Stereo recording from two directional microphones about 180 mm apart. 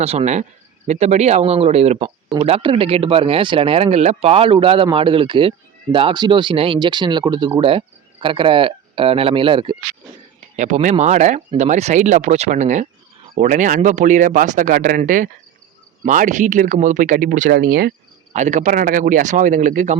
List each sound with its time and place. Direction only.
0.0 s speech: 35° right (ahead or behind)
10.6 s speech: 40° right (ahead or behind)
18.3 s speech: 40° right (ahead or behind)